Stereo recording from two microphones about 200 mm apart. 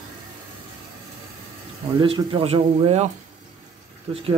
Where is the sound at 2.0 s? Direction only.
25° right (ahead or behind).